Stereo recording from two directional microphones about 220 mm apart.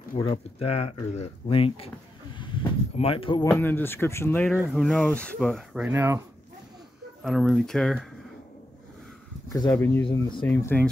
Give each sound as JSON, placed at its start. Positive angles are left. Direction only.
{"t": 0.2, "sound": "speech", "side_deg": 25}
{"t": 2.3, "sound": "a sound", "side_deg": 20}
{"t": 3.4, "sound": "speech", "side_deg": 10}
{"t": 4.5, "sound": "speech", "side_deg": 0}
{"t": 7.2, "sound": "speech", "side_deg": 0}
{"t": 9.5, "sound": "speech", "side_deg": 15}
{"t": 10.0, "sound": "speech", "side_deg": 20}
{"t": 10.4, "sound": "speech", "side_deg": 10}